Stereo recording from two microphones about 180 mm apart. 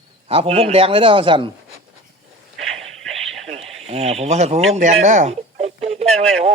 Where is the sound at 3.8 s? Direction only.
35° right (ahead or behind).